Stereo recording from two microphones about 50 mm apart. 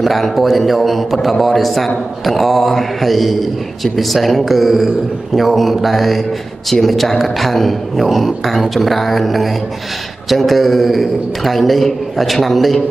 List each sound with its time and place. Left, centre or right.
0.0 s a man's voice: centre